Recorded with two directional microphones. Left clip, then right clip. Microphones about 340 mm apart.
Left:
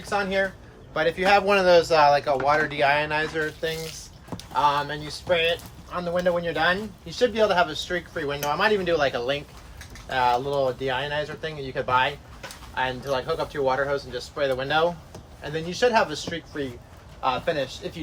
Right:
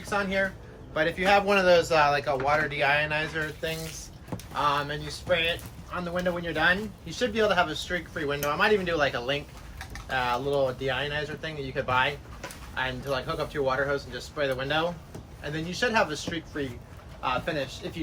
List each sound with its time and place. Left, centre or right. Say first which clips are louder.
0.0 s speech: left 3 dB; left